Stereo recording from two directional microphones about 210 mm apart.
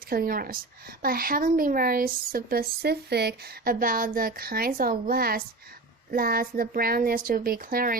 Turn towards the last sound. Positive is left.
turn(degrees=-45)  # may be behind; listen again after turning